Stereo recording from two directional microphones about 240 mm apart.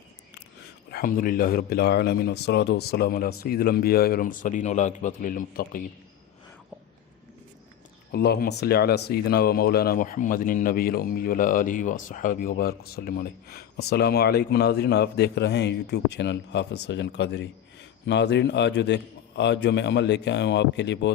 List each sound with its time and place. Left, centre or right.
0.9 s speech: left
8.1 s a man's voice: left